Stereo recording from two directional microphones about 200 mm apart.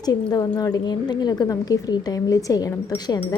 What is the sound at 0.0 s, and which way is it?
A woman's voice, 20° left (ahead or behind).